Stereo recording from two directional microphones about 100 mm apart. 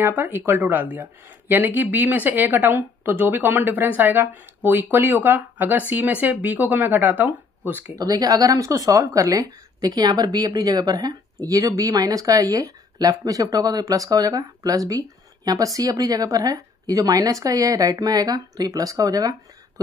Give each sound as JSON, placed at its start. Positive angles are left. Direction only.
{"t": 0.0, "sound": "speech", "side_deg": -25}
{"t": 8.0, "sound": "speech", "side_deg": -35}